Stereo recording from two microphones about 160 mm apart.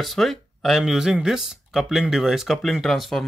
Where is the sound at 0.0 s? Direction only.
Centre (ahead or behind).